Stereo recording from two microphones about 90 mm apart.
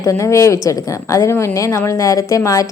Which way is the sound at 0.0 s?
35° left (ahead or behind).